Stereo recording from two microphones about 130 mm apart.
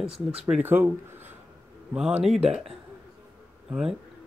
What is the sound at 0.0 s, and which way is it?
Speech, 50° right (ahead or behind).